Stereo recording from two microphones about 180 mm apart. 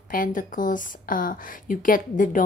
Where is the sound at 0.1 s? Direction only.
50° left (ahead or behind).